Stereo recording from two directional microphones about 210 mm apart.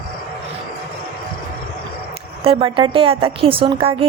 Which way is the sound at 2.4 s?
25° right (ahead or behind).